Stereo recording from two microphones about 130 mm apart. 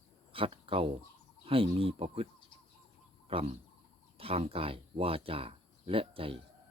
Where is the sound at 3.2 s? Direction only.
50° right (ahead or behind).